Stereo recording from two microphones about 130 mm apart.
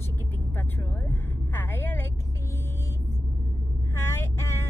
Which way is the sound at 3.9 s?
20° left (ahead or behind).